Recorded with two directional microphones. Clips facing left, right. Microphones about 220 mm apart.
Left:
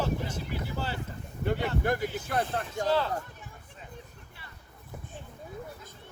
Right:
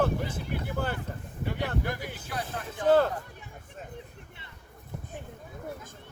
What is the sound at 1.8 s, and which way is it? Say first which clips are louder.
Speech: left 5 dB; 50° left (ahead or behind).